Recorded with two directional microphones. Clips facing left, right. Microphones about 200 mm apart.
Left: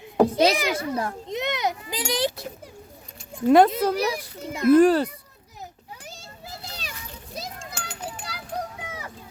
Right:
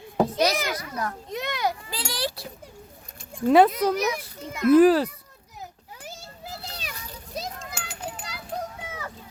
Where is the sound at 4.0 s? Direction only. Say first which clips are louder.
Left 1 dB; 30° left (ahead or behind).